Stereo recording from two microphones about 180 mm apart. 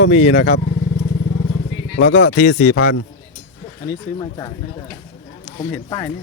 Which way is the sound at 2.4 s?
45° left (ahead or behind).